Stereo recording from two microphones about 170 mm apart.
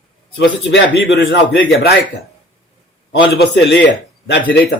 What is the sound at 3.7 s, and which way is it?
Speech, 85° left.